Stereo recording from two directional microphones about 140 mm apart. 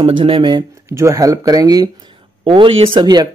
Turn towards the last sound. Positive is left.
turn(degrees=-30)  # may be behind; listen again after turning